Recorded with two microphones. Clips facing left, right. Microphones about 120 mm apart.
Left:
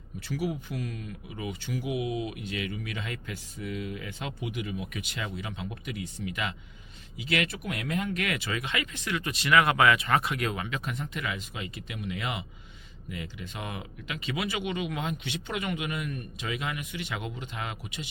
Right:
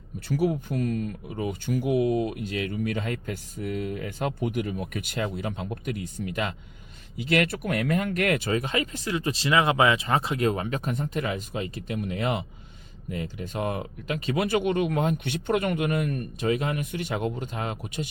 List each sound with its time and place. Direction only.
0.3 s speech: 45° right (ahead or behind)